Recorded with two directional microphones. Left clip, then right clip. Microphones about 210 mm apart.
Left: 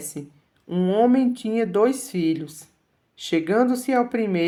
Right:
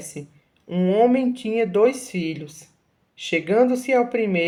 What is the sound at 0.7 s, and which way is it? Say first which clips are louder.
Speech: right 1 dB; 30° left (ahead or behind).